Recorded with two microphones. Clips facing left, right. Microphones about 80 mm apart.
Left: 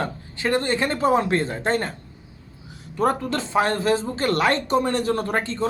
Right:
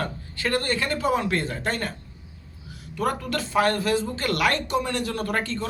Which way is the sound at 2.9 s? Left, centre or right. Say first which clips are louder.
Left 4 dB; left.